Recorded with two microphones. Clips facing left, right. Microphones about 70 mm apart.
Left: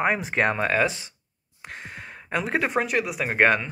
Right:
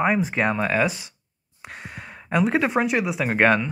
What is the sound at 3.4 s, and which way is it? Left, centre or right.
Speech, centre.